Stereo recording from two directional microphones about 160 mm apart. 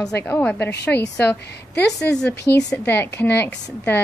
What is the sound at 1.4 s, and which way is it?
Speech, 90° left.